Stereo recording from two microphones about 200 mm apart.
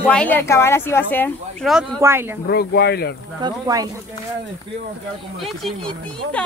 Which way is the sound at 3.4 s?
15° right (ahead or behind).